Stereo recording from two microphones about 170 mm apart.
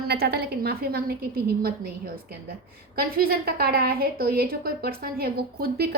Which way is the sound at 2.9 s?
65° right (ahead or behind).